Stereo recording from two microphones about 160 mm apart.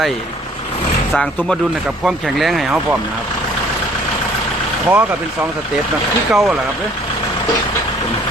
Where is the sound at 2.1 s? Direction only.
Centre (ahead or behind).